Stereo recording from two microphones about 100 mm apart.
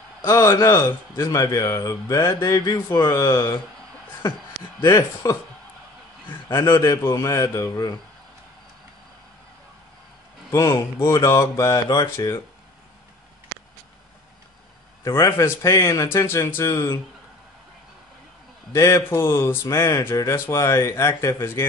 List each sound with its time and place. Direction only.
0.2 s a man's voice: 30° left (ahead or behind)
4.8 s a man's voice: 35° left (ahead or behind)
6.5 s a man's voice: 30° left (ahead or behind)
10.5 s a man's voice: 30° left (ahead or behind)
15.0 s a man's voice: 30° left (ahead or behind)
18.7 s a man's voice: 30° left (ahead or behind)